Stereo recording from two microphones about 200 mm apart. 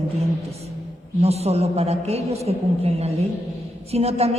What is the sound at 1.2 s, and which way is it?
A woman's voice, 30° right (ahead or behind).